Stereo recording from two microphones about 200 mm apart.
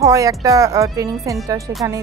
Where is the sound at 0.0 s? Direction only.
15° right (ahead or behind).